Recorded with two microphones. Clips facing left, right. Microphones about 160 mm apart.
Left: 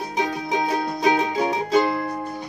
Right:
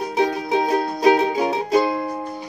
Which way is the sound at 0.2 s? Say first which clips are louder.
Right 4 dB; 35° right (ahead or behind).